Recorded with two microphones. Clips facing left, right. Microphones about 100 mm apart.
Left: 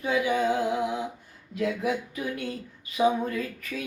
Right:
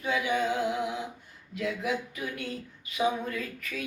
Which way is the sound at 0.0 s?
35° left (ahead or behind).